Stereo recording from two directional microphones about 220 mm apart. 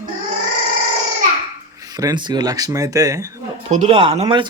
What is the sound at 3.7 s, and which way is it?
Speech, 30° right (ahead or behind).